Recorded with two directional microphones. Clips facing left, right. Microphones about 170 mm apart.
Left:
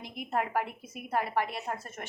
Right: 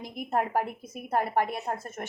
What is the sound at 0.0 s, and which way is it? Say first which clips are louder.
Speech: right 3 dB; 45° right (ahead or behind).